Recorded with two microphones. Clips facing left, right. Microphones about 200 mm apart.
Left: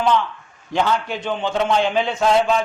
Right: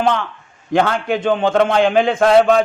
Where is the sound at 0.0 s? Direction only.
55° right (ahead or behind).